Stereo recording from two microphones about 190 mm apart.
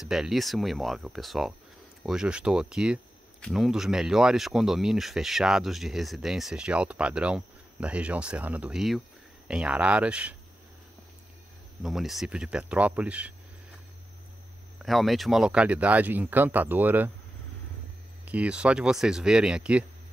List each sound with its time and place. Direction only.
0.0 s speech: centre (ahead or behind)
11.8 s speech: centre (ahead or behind)
14.8 s speech: centre (ahead or behind)
18.2 s speech: 5° right (ahead or behind)